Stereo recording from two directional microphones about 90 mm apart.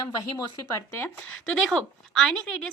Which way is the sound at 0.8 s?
25° left (ahead or behind).